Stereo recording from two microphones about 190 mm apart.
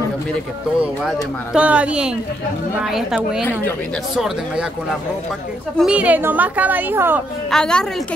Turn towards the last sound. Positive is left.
turn(degrees=5)  # may be behind; listen again after turning